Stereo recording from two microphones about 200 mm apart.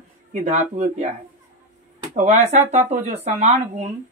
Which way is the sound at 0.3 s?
35° right (ahead or behind).